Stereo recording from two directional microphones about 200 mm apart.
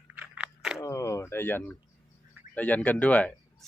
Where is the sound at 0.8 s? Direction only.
15° left (ahead or behind).